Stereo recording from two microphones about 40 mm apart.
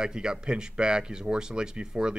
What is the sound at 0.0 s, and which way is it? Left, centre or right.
Speech, centre.